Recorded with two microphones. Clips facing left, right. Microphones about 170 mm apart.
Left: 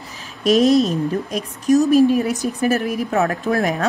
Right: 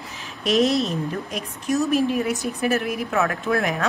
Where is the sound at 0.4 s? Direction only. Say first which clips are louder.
Left 6 dB; 40° left (ahead or behind).